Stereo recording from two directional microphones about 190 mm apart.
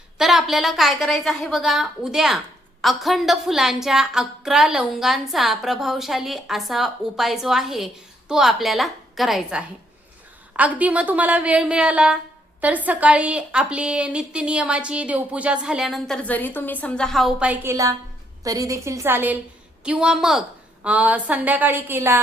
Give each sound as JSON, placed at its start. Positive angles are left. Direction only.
{"t": 0.2, "sound": "a woman's voice", "side_deg": 0}